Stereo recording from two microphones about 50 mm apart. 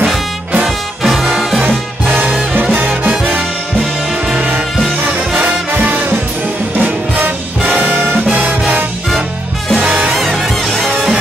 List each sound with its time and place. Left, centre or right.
0.7 s music: centre
3.1 s music: right
5.8 s music: right
7.2 s music: right
9.8 s music: right
10.1 s music: centre